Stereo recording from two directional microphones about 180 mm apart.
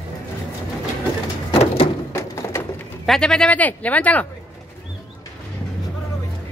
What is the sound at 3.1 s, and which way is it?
Speech, 5° left (ahead or behind).